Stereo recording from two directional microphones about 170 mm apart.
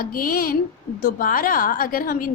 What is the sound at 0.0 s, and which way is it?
A woman's voice, 60° left (ahead or behind).